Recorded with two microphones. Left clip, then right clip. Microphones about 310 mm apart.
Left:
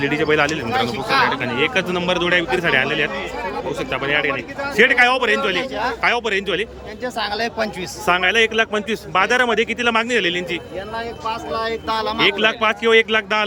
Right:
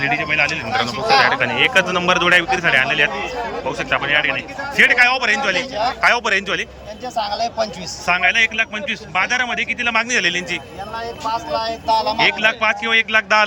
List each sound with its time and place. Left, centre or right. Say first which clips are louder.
0.0 s a man's voice: even; centre
7.2 s a man's voice: right 2 dB; centre